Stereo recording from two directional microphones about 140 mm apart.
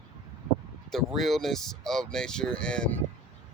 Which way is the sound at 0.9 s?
Centre (ahead or behind).